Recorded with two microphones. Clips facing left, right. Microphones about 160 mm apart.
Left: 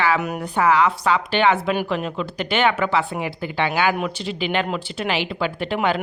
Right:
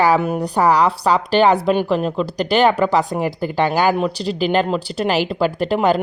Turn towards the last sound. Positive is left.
turn(degrees=-40)  # may be behind; listen again after turning